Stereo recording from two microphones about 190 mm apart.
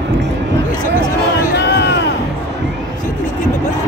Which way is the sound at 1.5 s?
60° left (ahead or behind).